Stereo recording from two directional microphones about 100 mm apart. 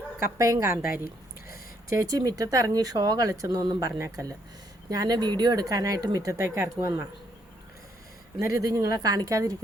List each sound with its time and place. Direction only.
0.3 s speech: 30° right (ahead or behind)
1.9 s speech: 35° right (ahead or behind)
8.4 s speech: 35° right (ahead or behind)